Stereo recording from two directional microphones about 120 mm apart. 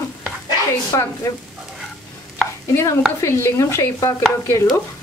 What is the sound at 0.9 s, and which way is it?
Speech, 25° left (ahead or behind).